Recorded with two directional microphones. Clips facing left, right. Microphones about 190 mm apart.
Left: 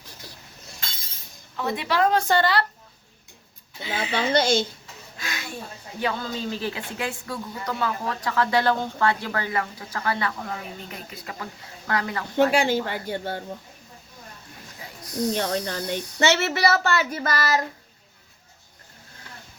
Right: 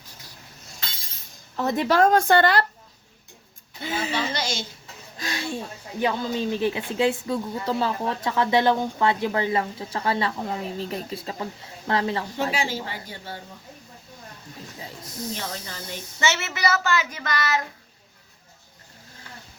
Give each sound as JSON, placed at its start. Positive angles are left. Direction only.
{"t": 1.5, "sound": "speech", "side_deg": -45}
{"t": 3.8, "sound": "speech", "side_deg": -45}
{"t": 4.4, "sound": "speech", "side_deg": 55}
{"t": 5.1, "sound": "speech", "side_deg": -35}
{"t": 6.0, "sound": "speech", "side_deg": -20}
{"t": 12.4, "sound": "speech", "side_deg": 60}
{"t": 15.4, "sound": "speech", "side_deg": 65}
{"t": 16.6, "sound": "speech", "side_deg": 35}